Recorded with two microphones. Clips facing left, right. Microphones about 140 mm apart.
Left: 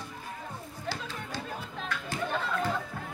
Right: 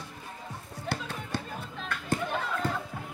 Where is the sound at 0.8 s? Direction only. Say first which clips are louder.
Right 2 dB; 60° right (ahead or behind).